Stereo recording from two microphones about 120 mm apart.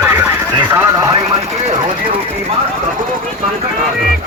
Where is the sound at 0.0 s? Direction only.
20° right (ahead or behind).